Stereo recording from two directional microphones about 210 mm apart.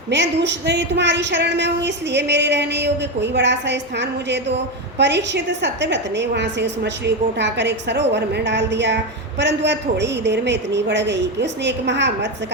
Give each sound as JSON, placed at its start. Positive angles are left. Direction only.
{"t": 0.1, "sound": "speech", "side_deg": -55}